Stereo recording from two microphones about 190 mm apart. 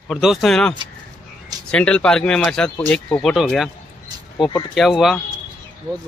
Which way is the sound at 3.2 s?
Centre (ahead or behind).